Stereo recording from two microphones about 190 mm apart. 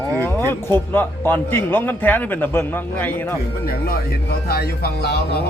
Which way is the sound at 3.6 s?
50° left (ahead or behind).